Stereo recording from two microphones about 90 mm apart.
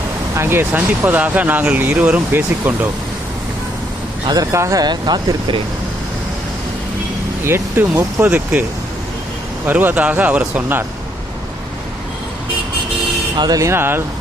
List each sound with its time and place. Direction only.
0.3 s speech: 25° right (ahead or behind)
4.5 s speech: 35° right (ahead or behind)
4.8 s speech: 50° right (ahead or behind)
7.4 s speech: 30° right (ahead or behind)
9.6 s speech: 20° right (ahead or behind)
13.3 s speech: 55° right (ahead or behind)
13.6 s speech: 30° right (ahead or behind)